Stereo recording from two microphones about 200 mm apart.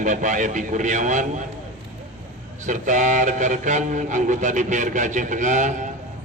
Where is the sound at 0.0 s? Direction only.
40° right (ahead or behind).